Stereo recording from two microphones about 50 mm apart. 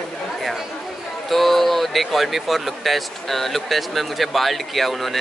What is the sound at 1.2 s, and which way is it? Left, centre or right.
Speech, centre.